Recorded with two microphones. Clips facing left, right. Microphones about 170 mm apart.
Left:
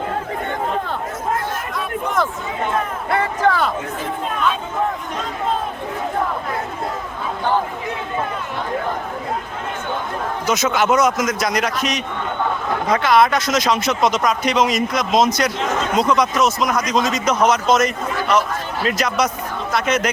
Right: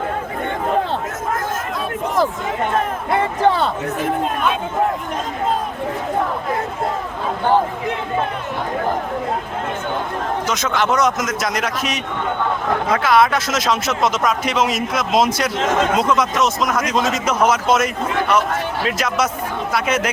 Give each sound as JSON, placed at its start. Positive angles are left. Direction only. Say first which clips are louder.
{"t": 3.1, "sound": "speech", "louder": "right 1 dB", "side_deg": -25}
{"t": 10.5, "sound": "speech", "louder": "left 4 dB", "side_deg": 5}